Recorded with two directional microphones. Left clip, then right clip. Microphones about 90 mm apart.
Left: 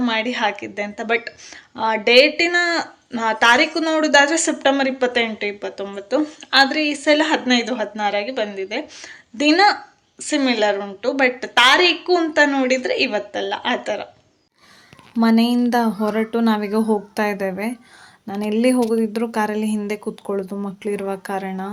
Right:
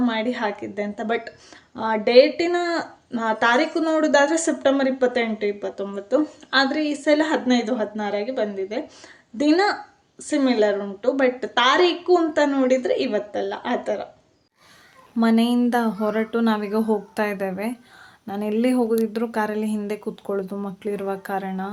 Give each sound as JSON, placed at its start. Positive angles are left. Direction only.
{"t": 0.0, "sound": "a woman's voice", "side_deg": -35}
{"t": 15.2, "sound": "speech", "side_deg": 25}